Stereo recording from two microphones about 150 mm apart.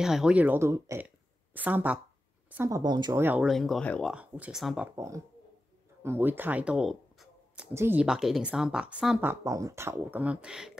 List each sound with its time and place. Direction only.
0.0 s a woman's voice: 5° right (ahead or behind); by 1.0 s 20° right (ahead or behind)
1.0 s a sound: 10° right (ahead or behind)
2.5 s speech: 15° right (ahead or behind)
2.8 s speech: 30° right (ahead or behind)
3.2 s a woman's voice: 15° right (ahead or behind)
3.4 s speech: centre (ahead or behind)
4.1 s a woman's voice: 10° right (ahead or behind)
4.9 s speech: 20° right (ahead or behind); by 7.6 s centre (ahead or behind)
7.7 s a woman's voice: 15° right (ahead or behind)